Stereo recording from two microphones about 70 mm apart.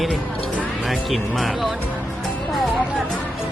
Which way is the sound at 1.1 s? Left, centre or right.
Centre.